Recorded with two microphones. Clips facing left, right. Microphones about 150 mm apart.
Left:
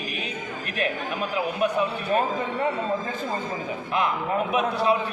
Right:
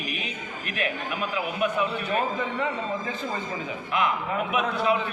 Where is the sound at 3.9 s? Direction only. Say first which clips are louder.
Left 1 dB; 35° left (ahead or behind).